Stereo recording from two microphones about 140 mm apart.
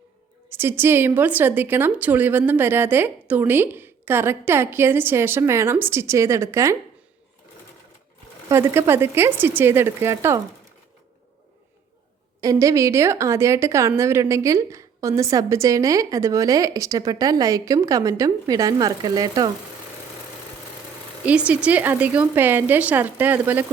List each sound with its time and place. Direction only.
0.5 s a woman's voice: 15° right (ahead or behind)
8.4 s a woman's voice: 15° right (ahead or behind)
12.4 s a woman's voice: 25° right (ahead or behind)
21.2 s a woman's voice: 10° right (ahead or behind)